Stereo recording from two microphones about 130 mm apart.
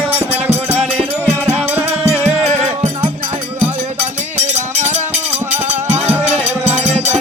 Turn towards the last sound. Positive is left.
turn(degrees=-55)  # may be behind; listen again after turning